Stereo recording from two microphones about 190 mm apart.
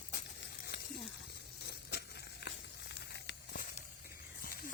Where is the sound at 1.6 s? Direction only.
60° left (ahead or behind).